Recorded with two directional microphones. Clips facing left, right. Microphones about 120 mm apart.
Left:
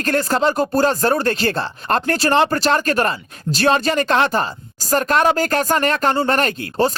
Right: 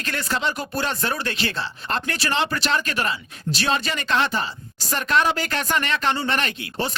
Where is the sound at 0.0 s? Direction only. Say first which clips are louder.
Left 8 dB; 45° left (ahead or behind).